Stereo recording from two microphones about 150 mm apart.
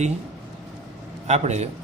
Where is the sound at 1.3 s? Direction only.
50° right (ahead or behind).